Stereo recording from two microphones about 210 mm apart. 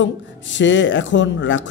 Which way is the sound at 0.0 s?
60° left (ahead or behind).